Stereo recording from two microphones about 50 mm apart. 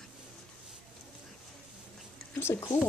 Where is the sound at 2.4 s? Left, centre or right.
Left.